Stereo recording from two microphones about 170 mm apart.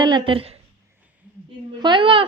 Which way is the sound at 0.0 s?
30° right (ahead or behind).